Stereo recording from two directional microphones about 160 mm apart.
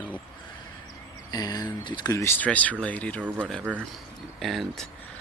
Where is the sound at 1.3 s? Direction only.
25° left (ahead or behind).